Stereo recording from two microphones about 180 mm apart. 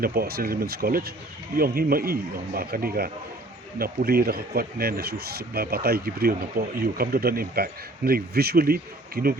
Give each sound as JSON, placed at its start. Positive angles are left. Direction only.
{"t": 0.0, "sound": "speech", "side_deg": -60}